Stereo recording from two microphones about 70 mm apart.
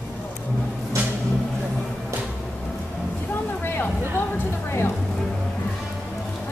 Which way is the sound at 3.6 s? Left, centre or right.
Left.